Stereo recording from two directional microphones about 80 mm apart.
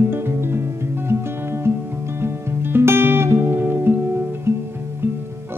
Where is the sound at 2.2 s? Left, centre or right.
Right.